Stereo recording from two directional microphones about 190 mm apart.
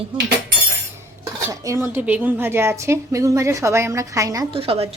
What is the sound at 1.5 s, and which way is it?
A woman's voice, 15° right (ahead or behind).